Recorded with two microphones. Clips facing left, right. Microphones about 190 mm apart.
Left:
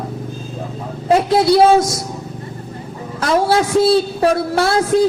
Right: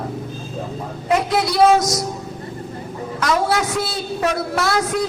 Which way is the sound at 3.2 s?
30° left (ahead or behind).